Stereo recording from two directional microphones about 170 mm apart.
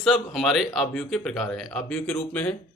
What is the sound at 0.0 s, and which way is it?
Speech, centre (ahead or behind).